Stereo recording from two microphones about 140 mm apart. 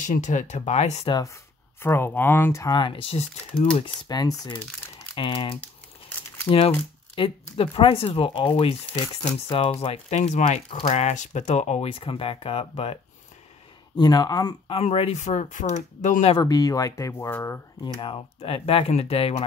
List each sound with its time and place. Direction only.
0.0 s speech: 60° left (ahead or behind)
1.0 s speech: 25° left (ahead or behind); by 3.3 s 45° left (ahead or behind)
3.7 s speech: 35° left (ahead or behind)
7.2 s speech: 40° left (ahead or behind)
13.9 s speech: 30° left (ahead or behind)
14.7 s speech: 45° left (ahead or behind)
16.3 s speech: 30° left (ahead or behind)
17.8 s speech: 35° left (ahead or behind)